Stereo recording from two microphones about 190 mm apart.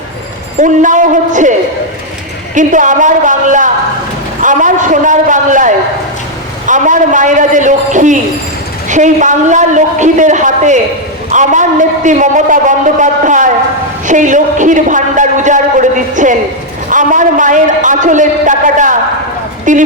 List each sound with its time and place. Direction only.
0.6 s a man's voice: 40° right (ahead or behind)
2.6 s a man's voice: 40° right (ahead or behind)
4.4 s a sound: 40° right (ahead or behind)
8.9 s a man's voice: 40° right (ahead or behind)
14.1 s a sound: 40° right (ahead or behind)
19.7 s a man's voice: 40° right (ahead or behind)